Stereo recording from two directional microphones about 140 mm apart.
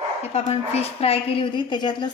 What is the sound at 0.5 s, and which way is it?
A woman's voice, 45° left (ahead or behind).